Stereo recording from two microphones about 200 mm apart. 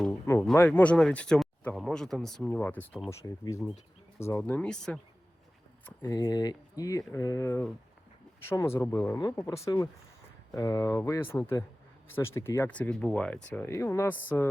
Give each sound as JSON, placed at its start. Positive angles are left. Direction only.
{"t": 0.5, "sound": "speech", "side_deg": 10}